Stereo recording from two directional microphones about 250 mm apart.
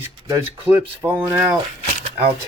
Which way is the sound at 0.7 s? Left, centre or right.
Centre.